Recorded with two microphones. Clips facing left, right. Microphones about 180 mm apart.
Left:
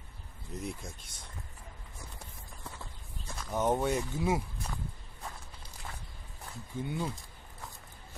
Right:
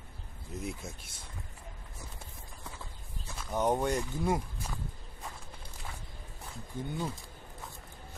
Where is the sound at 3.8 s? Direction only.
5° left (ahead or behind).